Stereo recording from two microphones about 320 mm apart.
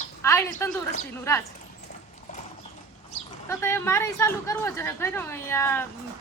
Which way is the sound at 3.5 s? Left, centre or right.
Centre.